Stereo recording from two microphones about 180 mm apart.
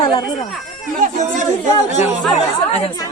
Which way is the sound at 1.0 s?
45° right (ahead or behind).